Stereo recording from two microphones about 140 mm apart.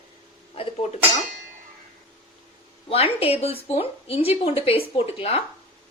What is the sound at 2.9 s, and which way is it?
A woman's voice, 45° left (ahead or behind).